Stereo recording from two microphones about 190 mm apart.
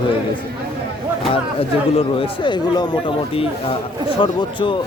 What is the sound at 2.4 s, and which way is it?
Speech, 20° left (ahead or behind).